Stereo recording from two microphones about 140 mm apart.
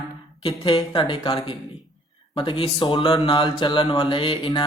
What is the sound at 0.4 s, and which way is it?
Speech, 40° left (ahead or behind).